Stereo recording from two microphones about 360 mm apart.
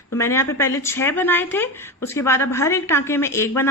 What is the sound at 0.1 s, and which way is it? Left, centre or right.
Speech, centre.